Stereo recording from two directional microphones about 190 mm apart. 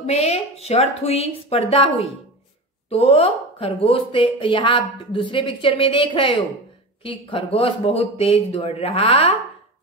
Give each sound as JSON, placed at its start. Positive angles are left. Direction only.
{"t": 0.0, "sound": "speech", "side_deg": 35}